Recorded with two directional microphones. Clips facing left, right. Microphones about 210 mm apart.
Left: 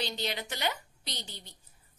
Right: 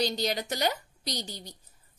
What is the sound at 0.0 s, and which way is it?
A woman's voice, 40° right (ahead or behind).